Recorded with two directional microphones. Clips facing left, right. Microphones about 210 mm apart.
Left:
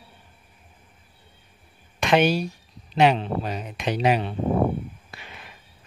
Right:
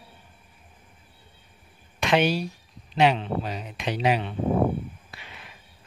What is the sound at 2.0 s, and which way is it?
Speech, 50° left (ahead or behind).